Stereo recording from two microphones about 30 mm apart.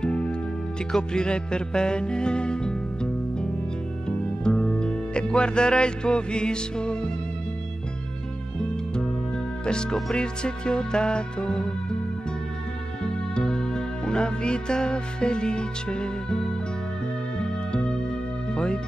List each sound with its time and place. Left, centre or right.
0.0 s music: left
4.5 s music: left
8.5 s music: left
13.0 s music: left